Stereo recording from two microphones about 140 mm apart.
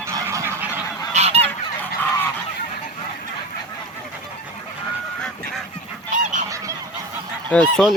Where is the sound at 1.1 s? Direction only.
50° right (ahead or behind).